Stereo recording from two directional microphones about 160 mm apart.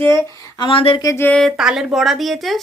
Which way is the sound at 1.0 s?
15° left (ahead or behind).